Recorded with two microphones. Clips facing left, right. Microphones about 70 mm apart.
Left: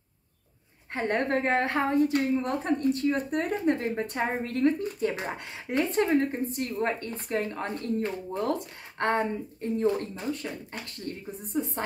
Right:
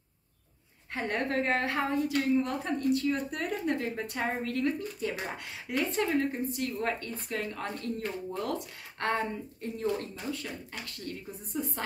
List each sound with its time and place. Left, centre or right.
0.9 s a woman's voice: left